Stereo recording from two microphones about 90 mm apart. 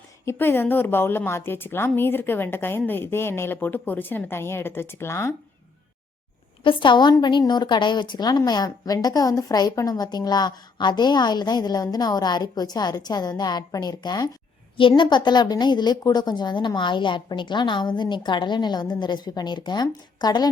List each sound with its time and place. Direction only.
0.3 s a woman's voice: 25° left (ahead or behind)
6.7 s a woman's voice: 65° left (ahead or behind)
14.8 s a woman's voice: 65° left (ahead or behind)